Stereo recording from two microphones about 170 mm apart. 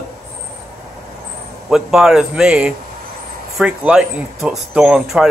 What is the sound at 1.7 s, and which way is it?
Speech, 5° right (ahead or behind).